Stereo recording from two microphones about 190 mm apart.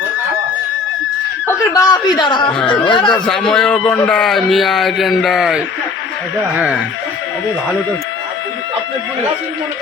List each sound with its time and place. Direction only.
1.5 s a man's voice: 20° left (ahead or behind)
2.6 s a man's voice: 5° left (ahead or behind)
2.8 s speech: 25° left (ahead or behind)
3.2 s a man's voice: centre (ahead or behind)